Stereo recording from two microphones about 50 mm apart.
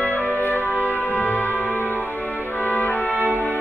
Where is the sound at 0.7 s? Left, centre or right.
Left.